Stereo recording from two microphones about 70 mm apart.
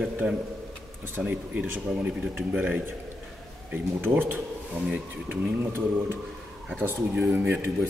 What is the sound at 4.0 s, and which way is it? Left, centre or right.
Speech, right.